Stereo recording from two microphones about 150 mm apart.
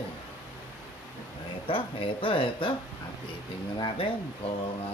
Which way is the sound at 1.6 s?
35° left (ahead or behind).